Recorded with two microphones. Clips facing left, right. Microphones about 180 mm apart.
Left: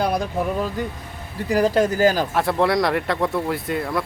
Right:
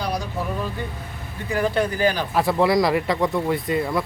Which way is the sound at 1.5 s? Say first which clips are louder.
Left 4 dB; 35° left (ahead or behind).